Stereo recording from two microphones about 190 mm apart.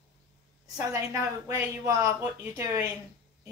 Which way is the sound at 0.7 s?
15° right (ahead or behind).